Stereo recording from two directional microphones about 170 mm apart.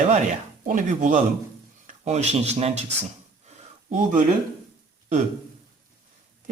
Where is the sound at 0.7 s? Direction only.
50° right (ahead or behind).